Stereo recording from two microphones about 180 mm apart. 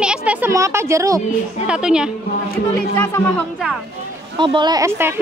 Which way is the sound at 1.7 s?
5° right (ahead or behind).